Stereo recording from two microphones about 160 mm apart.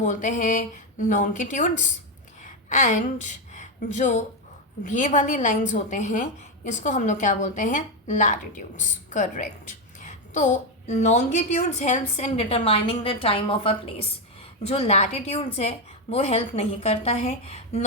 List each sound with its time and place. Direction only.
0.0 s a woman's voice: 50° left (ahead or behind)